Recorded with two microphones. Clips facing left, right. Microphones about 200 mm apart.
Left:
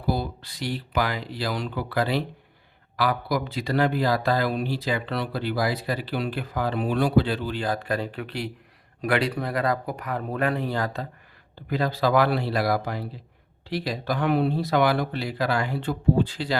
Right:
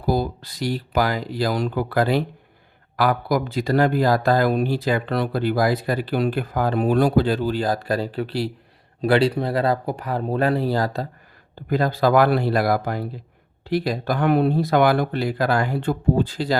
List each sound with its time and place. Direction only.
0.0 s speech: 45° right (ahead or behind)
11.7 s speech: 50° right (ahead or behind)